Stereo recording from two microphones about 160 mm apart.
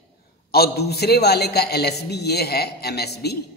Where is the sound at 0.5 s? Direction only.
80° left.